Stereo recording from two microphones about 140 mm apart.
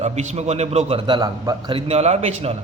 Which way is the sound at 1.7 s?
45° right (ahead or behind).